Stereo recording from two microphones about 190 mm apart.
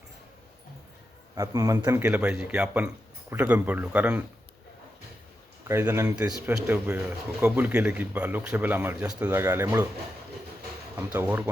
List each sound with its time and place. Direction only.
1.4 s speech: 20° right (ahead or behind)
5.6 s speech: 15° right (ahead or behind)
10.9 s speech: 10° right (ahead or behind)